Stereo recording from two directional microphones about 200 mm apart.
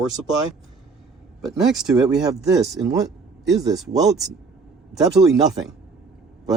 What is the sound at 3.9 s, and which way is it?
Speech, centre (ahead or behind).